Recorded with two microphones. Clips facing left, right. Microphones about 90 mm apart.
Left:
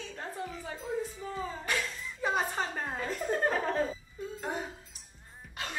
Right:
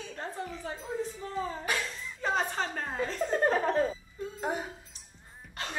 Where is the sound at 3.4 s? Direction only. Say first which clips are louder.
Right 5 dB; 10° right (ahead or behind).